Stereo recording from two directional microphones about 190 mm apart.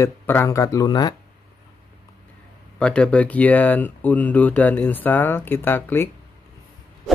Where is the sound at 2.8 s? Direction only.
5° left (ahead or behind).